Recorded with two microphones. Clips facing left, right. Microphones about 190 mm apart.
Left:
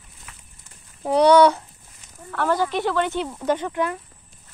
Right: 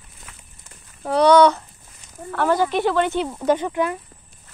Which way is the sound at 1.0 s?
15° left (ahead or behind).